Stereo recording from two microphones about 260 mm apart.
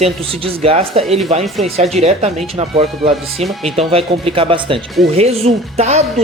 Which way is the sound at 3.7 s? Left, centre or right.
Right.